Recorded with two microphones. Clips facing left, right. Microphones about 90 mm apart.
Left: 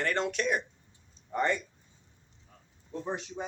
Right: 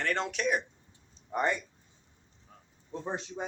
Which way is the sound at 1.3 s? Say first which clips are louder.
Left 1 dB; 15° right (ahead or behind).